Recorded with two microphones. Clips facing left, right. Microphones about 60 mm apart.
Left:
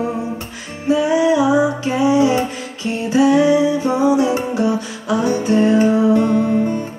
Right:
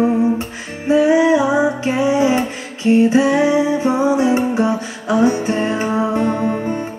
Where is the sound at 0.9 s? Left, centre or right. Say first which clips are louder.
Right 2 dB; right.